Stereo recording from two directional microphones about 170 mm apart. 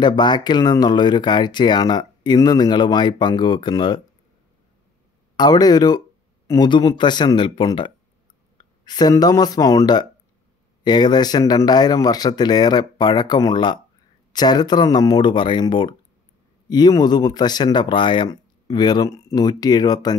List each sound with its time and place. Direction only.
0.0 s speech: 25° left (ahead or behind)
5.3 s speech: 25° left (ahead or behind)